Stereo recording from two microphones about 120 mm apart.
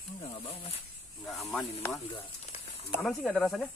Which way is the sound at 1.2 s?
Centre (ahead or behind).